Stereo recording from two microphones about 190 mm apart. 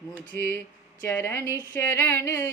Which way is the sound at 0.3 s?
15° left (ahead or behind).